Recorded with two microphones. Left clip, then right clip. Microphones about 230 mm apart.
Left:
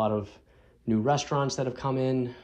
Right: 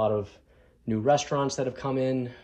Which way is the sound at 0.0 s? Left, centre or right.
Left.